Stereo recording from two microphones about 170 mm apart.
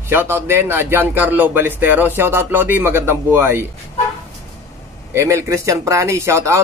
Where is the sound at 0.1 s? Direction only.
15° right (ahead or behind).